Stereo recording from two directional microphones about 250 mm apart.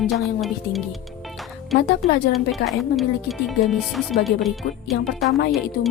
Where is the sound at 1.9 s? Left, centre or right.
Left.